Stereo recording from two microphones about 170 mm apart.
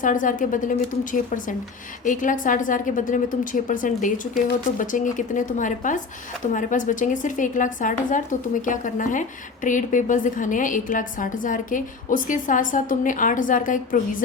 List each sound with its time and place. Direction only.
0.0 s a woman's voice: 50° left (ahead or behind)